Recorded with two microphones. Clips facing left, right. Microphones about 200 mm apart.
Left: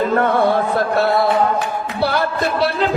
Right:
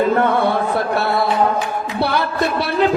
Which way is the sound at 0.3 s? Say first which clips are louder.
Left 1 dB; 60° right (ahead or behind).